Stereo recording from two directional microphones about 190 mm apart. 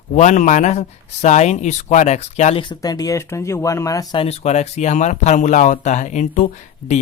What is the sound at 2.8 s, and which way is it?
Speech, 20° left (ahead or behind).